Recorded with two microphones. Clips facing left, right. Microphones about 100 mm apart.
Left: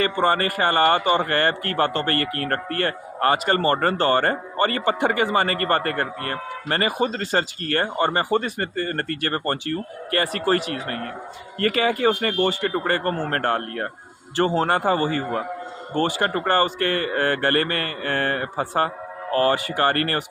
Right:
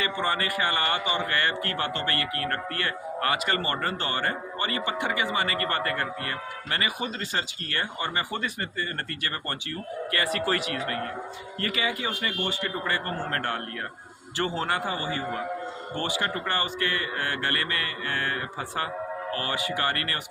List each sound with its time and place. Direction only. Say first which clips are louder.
0.0 s a man's voice: left 7 dB; 45° left (ahead or behind)
11.6 s a man's voice: left 10 dB; 50° left (ahead or behind)